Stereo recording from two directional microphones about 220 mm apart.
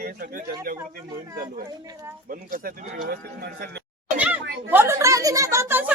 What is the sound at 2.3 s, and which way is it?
Speech, 40° right (ahead or behind).